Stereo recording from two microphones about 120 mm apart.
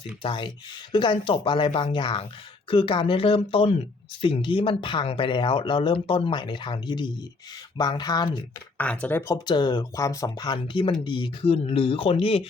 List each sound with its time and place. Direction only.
0.2 s speech: 45° left (ahead or behind)
8.8 s speech: 10° left (ahead or behind)
9.2 s speech: 35° left (ahead or behind); by 12.5 s 50° left (ahead or behind)